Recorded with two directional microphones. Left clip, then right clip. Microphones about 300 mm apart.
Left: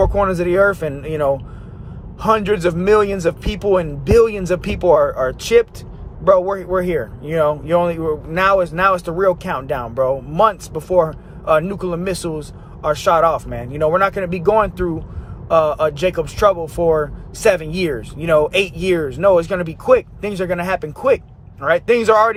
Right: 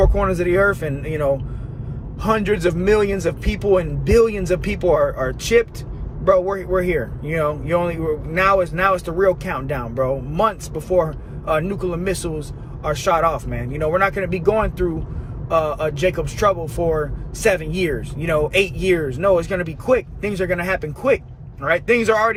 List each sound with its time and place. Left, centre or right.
0.0 s speech: centre